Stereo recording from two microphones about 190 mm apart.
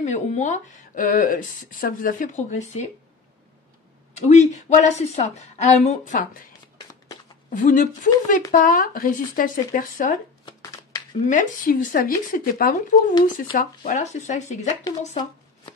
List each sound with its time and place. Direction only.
0.0 s speech: 40° left (ahead or behind)
4.3 s speech: 40° left (ahead or behind)
7.5 s speech: 45° left (ahead or behind)
11.2 s speech: 45° left (ahead or behind)
14.9 s speech: 20° left (ahead or behind)